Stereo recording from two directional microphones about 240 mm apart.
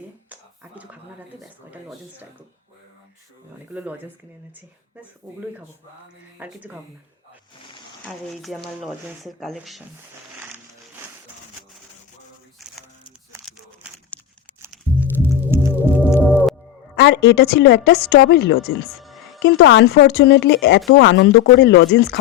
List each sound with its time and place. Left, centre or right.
1.4 s speech: centre
3.7 s speech: centre
8.0 s speech: centre
14.1 s a sound: centre
15.4 s music: centre
16.1 s music: centre
16.9 s a woman's voice: left
19.0 s music: centre
19.5 s a woman's voice: left